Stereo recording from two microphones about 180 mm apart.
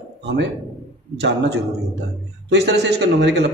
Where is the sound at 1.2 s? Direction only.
75° right (ahead or behind).